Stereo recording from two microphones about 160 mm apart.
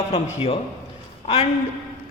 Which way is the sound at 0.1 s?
40° left (ahead or behind).